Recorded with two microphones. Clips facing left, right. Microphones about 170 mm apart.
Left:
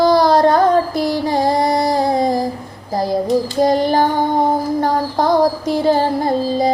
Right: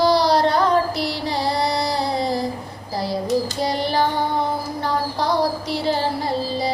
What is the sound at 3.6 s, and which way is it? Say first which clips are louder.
Child singing: left 7 dB; 45° left (ahead or behind).